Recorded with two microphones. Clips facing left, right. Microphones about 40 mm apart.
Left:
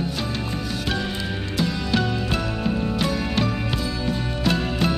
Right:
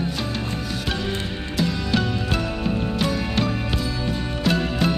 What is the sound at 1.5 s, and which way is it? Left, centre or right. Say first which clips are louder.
Music: right 1 dB; centre.